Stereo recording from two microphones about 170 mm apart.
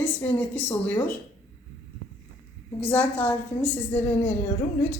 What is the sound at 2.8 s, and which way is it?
A woman's voice, 10° left (ahead or behind).